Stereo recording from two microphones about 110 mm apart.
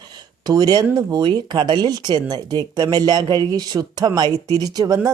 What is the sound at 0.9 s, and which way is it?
Speech, 40° right (ahead or behind).